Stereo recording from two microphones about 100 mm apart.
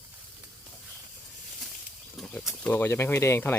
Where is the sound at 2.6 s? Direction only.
20° left (ahead or behind).